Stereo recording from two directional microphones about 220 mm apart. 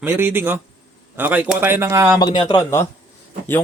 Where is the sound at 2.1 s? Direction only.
20° left (ahead or behind).